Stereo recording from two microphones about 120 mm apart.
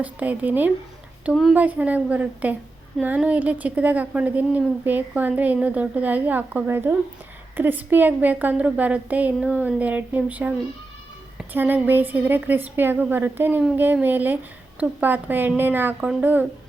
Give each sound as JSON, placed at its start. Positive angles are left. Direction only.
{"t": 0.0, "sound": "a woman's voice", "side_deg": -15}
{"t": 1.2, "sound": "speech", "side_deg": 0}
{"t": 1.5, "sound": "a woman's voice", "side_deg": -10}